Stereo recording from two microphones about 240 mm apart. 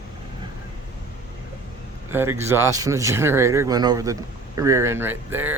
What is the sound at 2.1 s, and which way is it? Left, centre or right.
Speech, centre.